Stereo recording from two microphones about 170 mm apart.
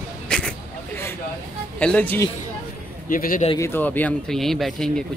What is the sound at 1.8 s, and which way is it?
Speech, 10° left (ahead or behind).